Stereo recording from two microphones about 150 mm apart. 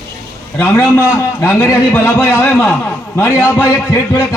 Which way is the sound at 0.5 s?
20° left (ahead or behind).